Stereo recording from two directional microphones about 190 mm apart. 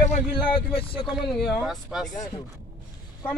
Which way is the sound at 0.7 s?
30° left (ahead or behind).